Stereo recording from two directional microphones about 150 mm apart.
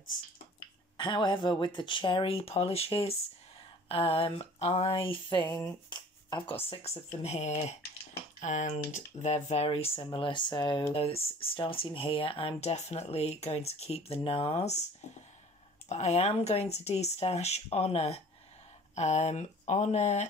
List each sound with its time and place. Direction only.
0.9 s speech: 30° left (ahead or behind)
5.4 s speech: 15° left (ahead or behind)
5.9 s a sound: 30° left (ahead or behind)
6.7 s speech: 45° left (ahead or behind)
15.9 s speech: 45° left (ahead or behind)